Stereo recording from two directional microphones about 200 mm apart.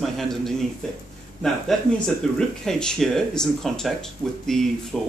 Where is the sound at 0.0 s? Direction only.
Centre (ahead or behind).